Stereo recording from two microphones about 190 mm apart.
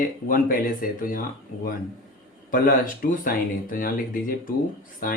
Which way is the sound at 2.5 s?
45° left (ahead or behind).